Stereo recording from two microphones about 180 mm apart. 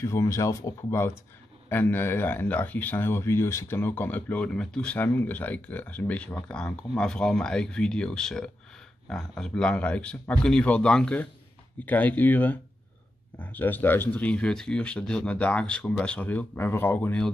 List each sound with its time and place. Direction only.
0.0 s speech: 15° left (ahead or behind)